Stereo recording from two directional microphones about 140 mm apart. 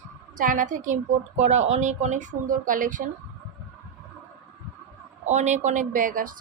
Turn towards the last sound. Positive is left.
turn(degrees=-70)  # may be behind; listen again after turning